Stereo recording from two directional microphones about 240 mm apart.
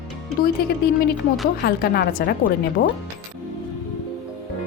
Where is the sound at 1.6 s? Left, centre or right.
Left.